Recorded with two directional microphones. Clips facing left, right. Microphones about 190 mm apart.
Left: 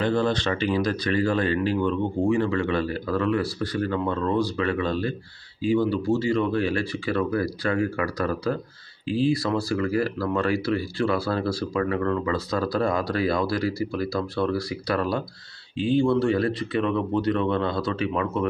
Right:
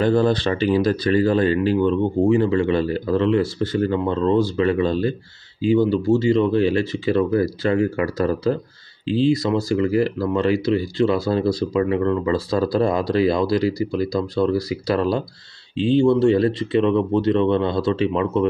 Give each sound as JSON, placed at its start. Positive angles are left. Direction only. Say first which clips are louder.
{"t": 0.0, "sound": "speech", "louder": "right 5 dB", "side_deg": -40}